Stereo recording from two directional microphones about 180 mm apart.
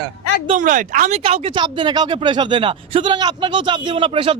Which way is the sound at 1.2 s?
30° right (ahead or behind).